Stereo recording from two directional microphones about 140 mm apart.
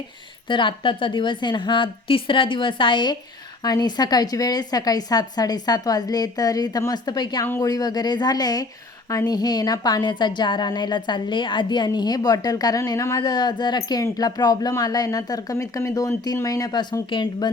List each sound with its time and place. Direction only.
0.4 s a woman's voice: 35° left (ahead or behind)